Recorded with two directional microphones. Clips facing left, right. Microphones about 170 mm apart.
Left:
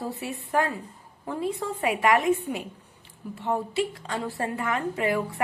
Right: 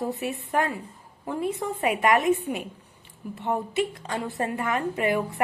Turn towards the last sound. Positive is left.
turn(degrees=-20)  # may be behind; listen again after turning